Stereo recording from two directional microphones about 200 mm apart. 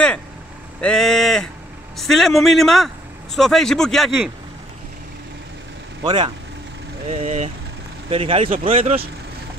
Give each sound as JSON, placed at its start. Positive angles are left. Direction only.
{"t": 0.7, "sound": "a sound", "side_deg": 5}
{"t": 2.0, "sound": "a man's voice", "side_deg": 0}
{"t": 6.0, "sound": "speech", "side_deg": -25}
{"t": 7.1, "sound": "speech", "side_deg": -35}
{"t": 8.5, "sound": "speech", "side_deg": -40}